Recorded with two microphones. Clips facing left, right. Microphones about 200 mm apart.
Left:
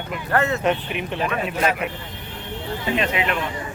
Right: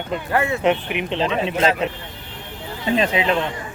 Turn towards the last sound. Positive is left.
turn(degrees=-30)  # may be behind; listen again after turning